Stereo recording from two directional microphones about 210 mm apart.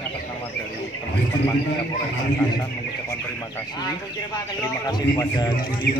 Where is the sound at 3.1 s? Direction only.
15° left (ahead or behind).